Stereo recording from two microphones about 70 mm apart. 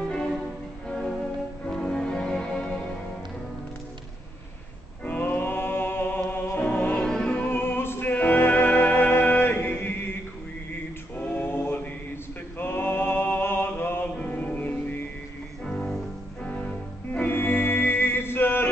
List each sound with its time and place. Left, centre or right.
0.8 s music: centre
5.0 s music: left
7.1 s music: centre
7.5 s music: left
11.1 s music: left
12.5 s a sound: left
14.1 s music: centre
15.6 s music: centre
17.1 s music: left